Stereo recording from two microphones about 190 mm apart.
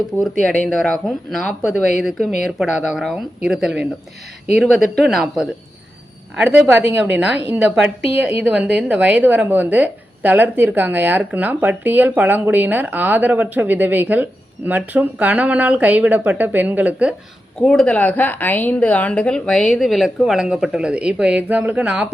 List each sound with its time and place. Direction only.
0.2 s a woman's voice: 5° left (ahead or behind)
7.0 s a woman's voice: 10° right (ahead or behind)
17.6 s a woman's voice: 5° left (ahead or behind)